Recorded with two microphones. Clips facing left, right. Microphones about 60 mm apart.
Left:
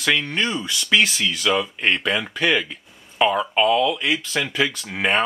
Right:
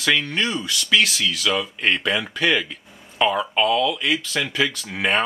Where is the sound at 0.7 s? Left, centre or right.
Centre.